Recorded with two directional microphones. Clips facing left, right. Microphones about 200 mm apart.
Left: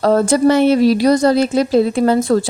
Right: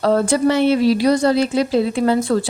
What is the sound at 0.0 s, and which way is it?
A woman's voice, 45° left (ahead or behind).